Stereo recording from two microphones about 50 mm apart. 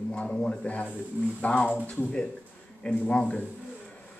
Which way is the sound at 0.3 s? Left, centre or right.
Centre.